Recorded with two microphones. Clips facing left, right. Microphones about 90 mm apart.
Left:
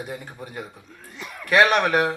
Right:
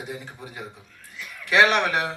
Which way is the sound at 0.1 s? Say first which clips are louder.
Left 2 dB; 50° left (ahead or behind).